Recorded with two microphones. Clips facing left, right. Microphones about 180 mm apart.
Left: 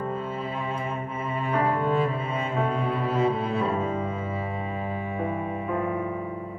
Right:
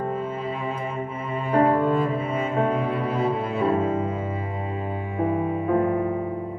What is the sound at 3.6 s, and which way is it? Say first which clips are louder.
Cello: right 5 dB; 45° right (ahead or behind).